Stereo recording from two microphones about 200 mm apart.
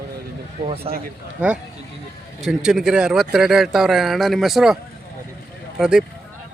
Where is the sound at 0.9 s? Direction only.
30° right (ahead or behind).